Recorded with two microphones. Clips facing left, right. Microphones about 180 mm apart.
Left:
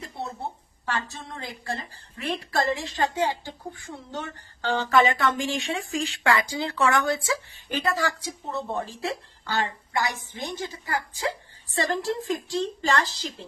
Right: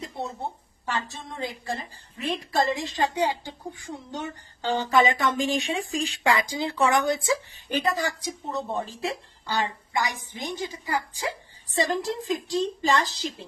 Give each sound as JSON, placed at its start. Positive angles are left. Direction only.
{"t": 0.8, "sound": "a woman's voice", "side_deg": -15}